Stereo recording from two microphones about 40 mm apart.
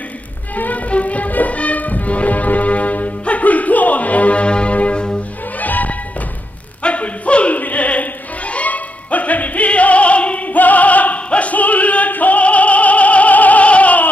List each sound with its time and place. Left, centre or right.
0.6 s music: left
5.6 s music: left
6.8 s music: left